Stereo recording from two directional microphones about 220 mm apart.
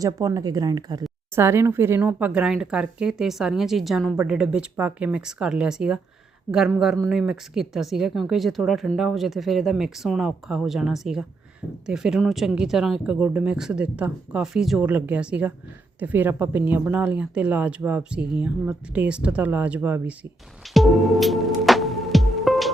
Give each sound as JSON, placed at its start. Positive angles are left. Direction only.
{"t": 0.0, "sound": "speech", "side_deg": -15}
{"t": 20.7, "sound": "music", "side_deg": 0}